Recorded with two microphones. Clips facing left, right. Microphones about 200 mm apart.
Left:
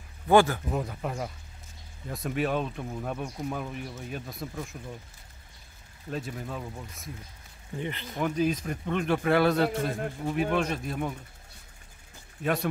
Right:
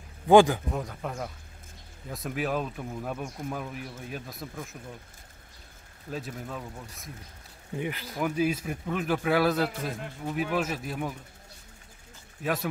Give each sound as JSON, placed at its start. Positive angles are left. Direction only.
{"t": 0.3, "sound": "speech", "side_deg": -15}
{"t": 0.7, "sound": "speech", "side_deg": 5}
{"t": 6.0, "sound": "speech", "side_deg": 0}